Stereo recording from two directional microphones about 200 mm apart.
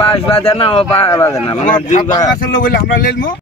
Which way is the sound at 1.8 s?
35° left (ahead or behind).